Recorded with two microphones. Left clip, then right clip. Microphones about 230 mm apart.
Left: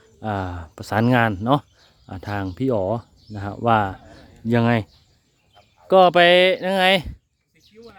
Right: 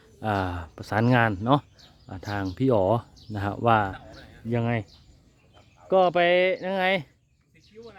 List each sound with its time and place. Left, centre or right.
0.0 s speech: centre
4.4 s speech: left
5.9 s speech: left
7.8 s a sound: centre